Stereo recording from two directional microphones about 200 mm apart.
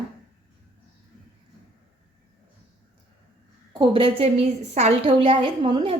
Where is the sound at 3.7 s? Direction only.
25° right (ahead or behind).